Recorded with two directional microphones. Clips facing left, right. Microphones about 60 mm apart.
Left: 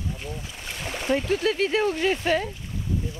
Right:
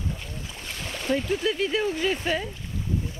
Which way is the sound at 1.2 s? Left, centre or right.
Left.